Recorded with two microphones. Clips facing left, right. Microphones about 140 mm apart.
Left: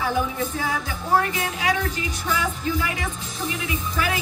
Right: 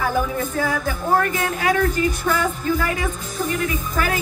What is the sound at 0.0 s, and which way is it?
Speech, 50° right (ahead or behind).